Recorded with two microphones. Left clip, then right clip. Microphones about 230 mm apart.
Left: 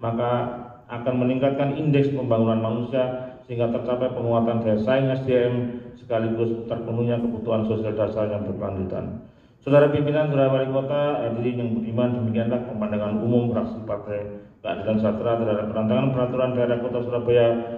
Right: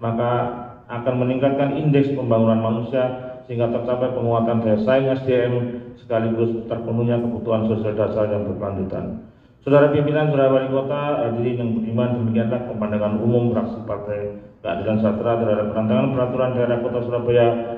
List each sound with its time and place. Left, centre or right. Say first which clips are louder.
0.0 s a man's voice: right 3 dB; left
9.7 s a man's voice: right 2 dB; left
14.7 s a man's voice: right 3 dB; left